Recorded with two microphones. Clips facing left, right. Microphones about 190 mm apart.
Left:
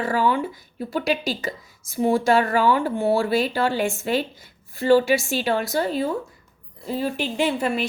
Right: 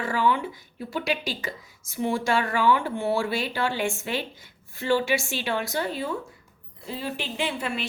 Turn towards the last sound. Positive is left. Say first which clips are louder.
# left 7 dB
turn(degrees=40)  # may be behind; listen again after turning